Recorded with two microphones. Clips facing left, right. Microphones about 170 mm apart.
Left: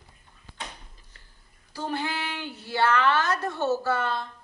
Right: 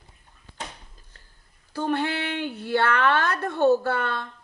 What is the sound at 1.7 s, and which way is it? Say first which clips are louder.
A woman's voice: right 5 dB; 60° right (ahead or behind).